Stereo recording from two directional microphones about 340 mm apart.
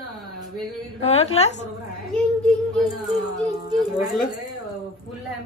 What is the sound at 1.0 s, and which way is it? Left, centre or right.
Speech, centre.